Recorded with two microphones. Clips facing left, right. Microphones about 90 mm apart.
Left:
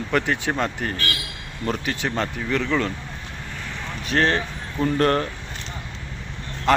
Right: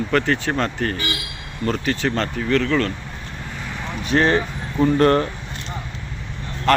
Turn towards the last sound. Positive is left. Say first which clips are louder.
# right 2 dB
turn(degrees=15)  # may be behind; listen again after turning